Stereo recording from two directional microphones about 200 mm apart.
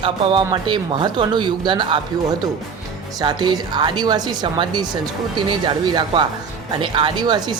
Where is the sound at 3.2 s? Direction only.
20° right (ahead or behind).